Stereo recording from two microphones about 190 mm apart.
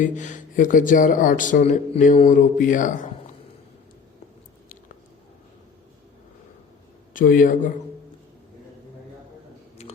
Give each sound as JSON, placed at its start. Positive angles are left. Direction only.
{"t": 0.0, "sound": "speech", "side_deg": 40}
{"t": 7.1, "sound": "a man's voice", "side_deg": 45}
{"t": 9.8, "sound": "a sound", "side_deg": 35}